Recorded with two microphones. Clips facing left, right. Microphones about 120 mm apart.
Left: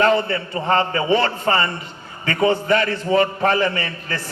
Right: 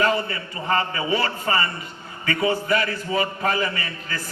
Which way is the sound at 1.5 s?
45° left (ahead or behind).